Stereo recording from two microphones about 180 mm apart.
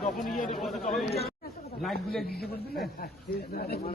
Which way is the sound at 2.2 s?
60° left (ahead or behind).